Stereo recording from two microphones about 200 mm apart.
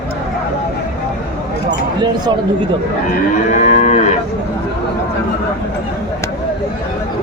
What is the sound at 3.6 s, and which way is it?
Cattle, 35° left (ahead or behind).